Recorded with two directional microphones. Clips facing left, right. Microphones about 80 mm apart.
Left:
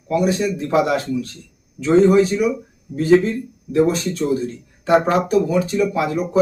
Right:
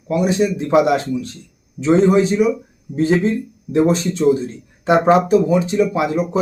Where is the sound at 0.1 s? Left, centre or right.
Right.